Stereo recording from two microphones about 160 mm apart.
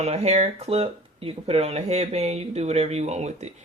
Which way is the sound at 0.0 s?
40° right (ahead or behind).